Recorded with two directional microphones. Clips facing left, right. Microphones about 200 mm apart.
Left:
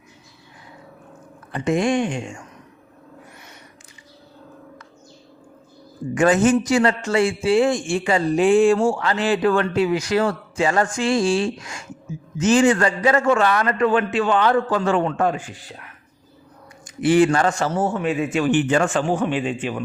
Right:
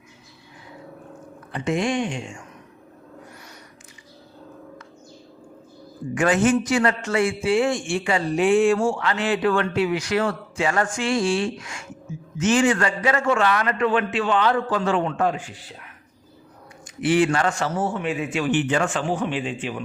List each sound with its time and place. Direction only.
1.5 s a man's voice: 45° left (ahead or behind)
6.2 s a man's voice: 40° left (ahead or behind)
17.0 s a man's voice: 40° left (ahead or behind)